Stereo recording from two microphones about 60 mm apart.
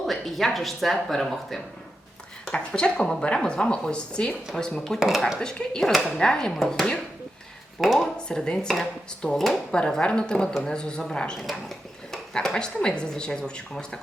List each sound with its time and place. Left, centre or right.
0.0 s speech: centre
4.9 s speech: centre
5.4 s speech: centre
5.9 s speech: centre
6.1 s speech: centre
7.8 s speech: centre
8.3 s speech: centre
9.7 s speech: centre